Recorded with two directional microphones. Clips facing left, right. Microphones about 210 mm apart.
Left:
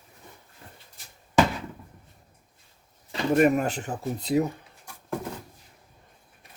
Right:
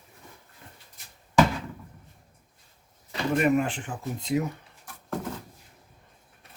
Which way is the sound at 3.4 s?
40° left (ahead or behind).